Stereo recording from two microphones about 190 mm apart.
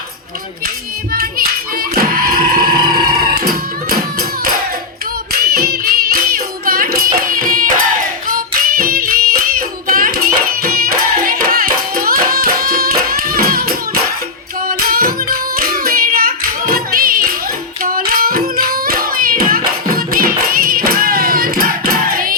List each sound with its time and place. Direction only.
1.1 s music: 50° right (ahead or behind)
5.3 s music: 55° right (ahead or behind)
14.7 s hands: 50° right (ahead or behind)